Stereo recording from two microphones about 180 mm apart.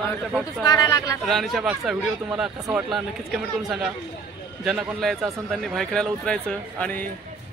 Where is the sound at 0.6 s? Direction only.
20° left (ahead or behind).